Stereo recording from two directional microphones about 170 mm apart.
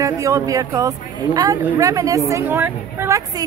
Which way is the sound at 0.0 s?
20° right (ahead or behind).